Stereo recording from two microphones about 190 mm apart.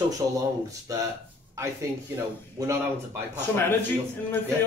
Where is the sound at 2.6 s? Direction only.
15° right (ahead or behind).